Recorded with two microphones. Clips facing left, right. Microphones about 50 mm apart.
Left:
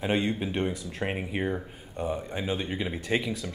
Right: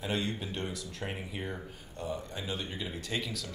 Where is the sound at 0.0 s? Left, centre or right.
Left.